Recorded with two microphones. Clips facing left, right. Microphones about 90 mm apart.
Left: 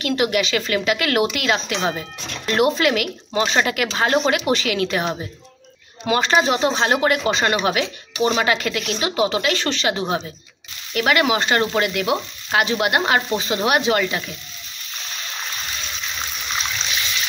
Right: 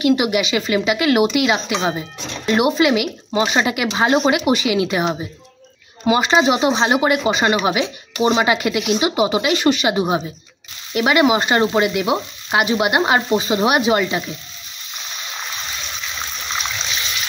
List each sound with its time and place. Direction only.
0.0 s speech: 10° right (ahead or behind)
6.0 s speech: 10° right (ahead or behind)
14.0 s frying: 20° right (ahead or behind)